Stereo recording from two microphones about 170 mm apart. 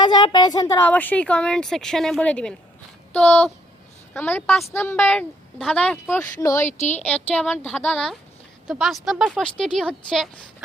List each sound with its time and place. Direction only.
0.0 s a woman's voice: 25° left (ahead or behind)
0.9 s a woman's voice: 10° left (ahead or behind)
6.7 s a woman's voice: 45° left (ahead or behind)
7.0 s a woman's voice: 10° left (ahead or behind)